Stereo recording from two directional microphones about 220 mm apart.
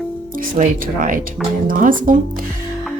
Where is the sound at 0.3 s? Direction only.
40° right (ahead or behind).